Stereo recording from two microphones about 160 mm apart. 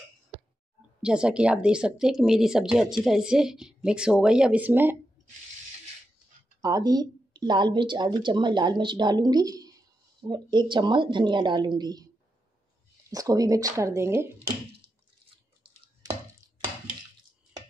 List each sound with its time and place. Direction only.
1.0 s speech: 5° right (ahead or behind)
6.6 s speech: 25° right (ahead or behind)
13.1 s speech: 20° right (ahead or behind)